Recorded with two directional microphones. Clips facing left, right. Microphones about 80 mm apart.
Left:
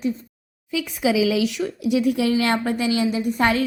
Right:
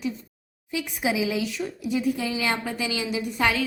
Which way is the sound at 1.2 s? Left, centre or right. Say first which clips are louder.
Left 6 dB; left.